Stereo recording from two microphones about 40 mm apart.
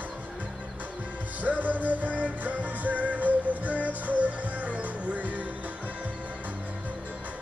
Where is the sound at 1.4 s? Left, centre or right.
Right.